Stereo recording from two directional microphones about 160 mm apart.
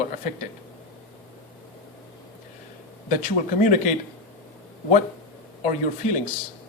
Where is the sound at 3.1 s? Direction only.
50° left (ahead or behind).